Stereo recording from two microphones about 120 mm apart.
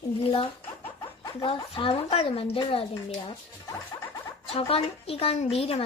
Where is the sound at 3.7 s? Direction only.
30° left (ahead or behind).